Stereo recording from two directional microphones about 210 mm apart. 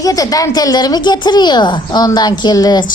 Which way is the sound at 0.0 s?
15° left (ahead or behind).